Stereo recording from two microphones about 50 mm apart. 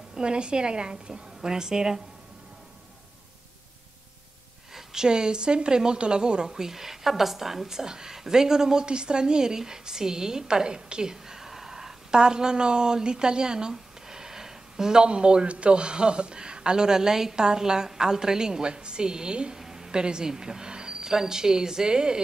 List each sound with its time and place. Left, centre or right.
0.1 s a woman's voice: centre
4.7 s a woman's voice: centre